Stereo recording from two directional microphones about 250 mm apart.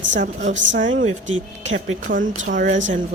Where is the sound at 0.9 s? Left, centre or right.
Right.